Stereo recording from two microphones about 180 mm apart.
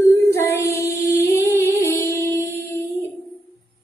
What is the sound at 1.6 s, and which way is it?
Music, 15° left (ahead or behind).